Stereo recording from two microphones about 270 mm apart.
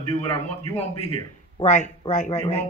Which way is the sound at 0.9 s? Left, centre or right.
Right.